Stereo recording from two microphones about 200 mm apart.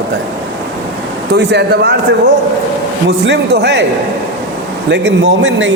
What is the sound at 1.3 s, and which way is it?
Speech, 55° right (ahead or behind).